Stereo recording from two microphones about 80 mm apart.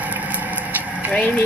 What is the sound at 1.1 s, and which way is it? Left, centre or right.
Speech, centre.